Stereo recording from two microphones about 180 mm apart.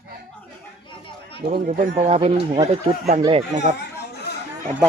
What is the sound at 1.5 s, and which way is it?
Speech, 50° right (ahead or behind).